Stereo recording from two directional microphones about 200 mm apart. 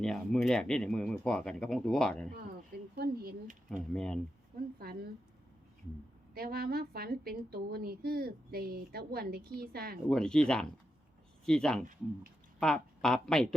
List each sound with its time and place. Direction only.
0.0 s speech: centre (ahead or behind)
2.3 s speech: 50° right (ahead or behind)
3.9 s speech: 5° left (ahead or behind)
4.8 s a woman's voice: 50° right (ahead or behind)
6.3 s a woman's voice: 50° right (ahead or behind)
10.1 s speech: 5° left (ahead or behind)